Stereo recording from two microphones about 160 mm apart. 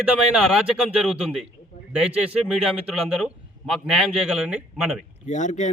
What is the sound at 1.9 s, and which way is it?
A man's voice, 10° right (ahead or behind).